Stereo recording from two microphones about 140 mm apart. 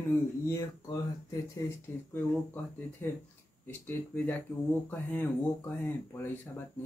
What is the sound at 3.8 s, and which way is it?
A man's voice, 10° left (ahead or behind).